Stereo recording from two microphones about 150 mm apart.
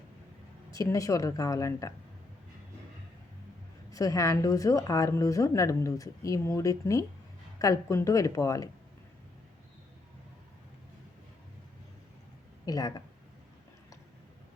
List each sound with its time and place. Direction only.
0.7 s speech: 20° left (ahead or behind)
3.9 s speech: 20° left (ahead or behind)
12.6 s speech: 25° left (ahead or behind)